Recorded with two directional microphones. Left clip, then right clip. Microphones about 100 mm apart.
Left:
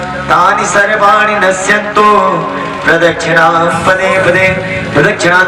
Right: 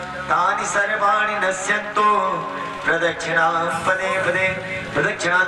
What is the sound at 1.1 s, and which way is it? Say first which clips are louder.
Music: left 11 dB; 15° left (ahead or behind).